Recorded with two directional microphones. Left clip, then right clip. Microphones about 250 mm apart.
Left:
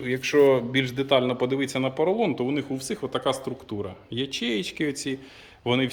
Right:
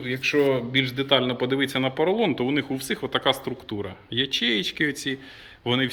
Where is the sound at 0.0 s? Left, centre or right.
Centre.